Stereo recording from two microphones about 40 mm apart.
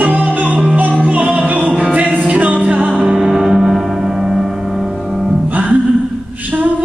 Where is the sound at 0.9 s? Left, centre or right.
Right.